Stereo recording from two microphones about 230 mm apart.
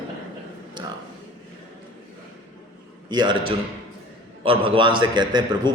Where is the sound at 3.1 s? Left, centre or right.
Centre.